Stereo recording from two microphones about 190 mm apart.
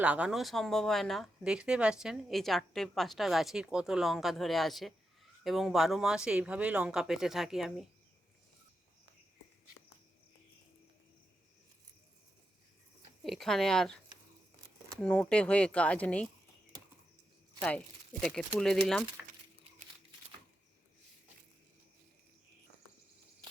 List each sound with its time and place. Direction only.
0.0 s speech: 5° right (ahead or behind)
13.2 s speech: centre (ahead or behind)
17.6 s speech: 5° left (ahead or behind)